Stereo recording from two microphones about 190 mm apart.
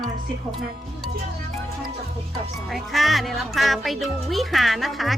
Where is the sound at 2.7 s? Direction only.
Centre (ahead or behind).